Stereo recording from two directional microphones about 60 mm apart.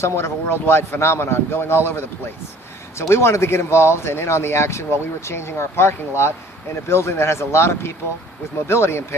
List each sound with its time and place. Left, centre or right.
0.0 s a man's voice: left
3.1 s speech: left